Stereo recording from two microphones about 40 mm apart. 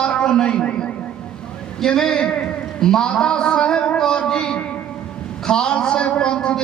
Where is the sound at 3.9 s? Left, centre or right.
Centre.